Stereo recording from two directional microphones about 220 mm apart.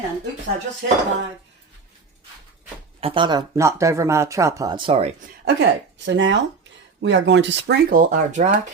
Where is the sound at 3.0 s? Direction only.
25° right (ahead or behind).